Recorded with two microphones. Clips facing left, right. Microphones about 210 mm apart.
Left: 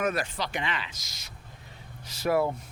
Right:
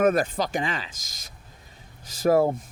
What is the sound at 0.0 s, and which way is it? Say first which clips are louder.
Speech: right 8 dB; 50° right (ahead or behind).